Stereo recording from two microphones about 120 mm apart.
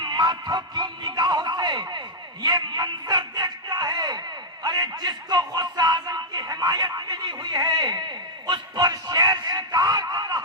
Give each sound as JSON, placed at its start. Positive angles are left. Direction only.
{"t": 0.0, "sound": "a man's voice", "side_deg": -35}